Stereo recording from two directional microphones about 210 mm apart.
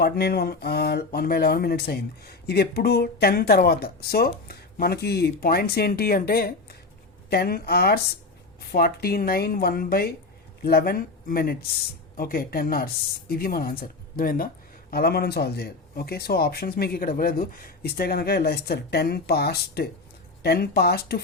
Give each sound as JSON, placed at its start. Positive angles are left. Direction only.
{"t": 0.0, "sound": "speech", "side_deg": 50}